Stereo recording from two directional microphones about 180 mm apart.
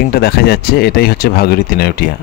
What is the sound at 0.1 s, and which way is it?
Speech, 60° left (ahead or behind).